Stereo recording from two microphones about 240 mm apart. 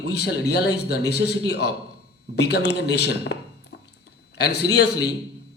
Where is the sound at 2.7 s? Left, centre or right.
Left.